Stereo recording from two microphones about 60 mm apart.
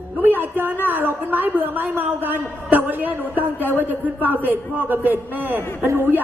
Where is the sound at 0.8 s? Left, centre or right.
Right.